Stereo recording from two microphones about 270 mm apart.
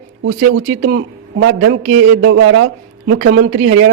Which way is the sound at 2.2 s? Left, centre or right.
Right.